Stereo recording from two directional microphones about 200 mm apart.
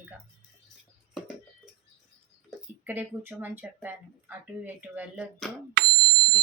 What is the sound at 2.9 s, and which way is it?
Speech, 10° right (ahead or behind).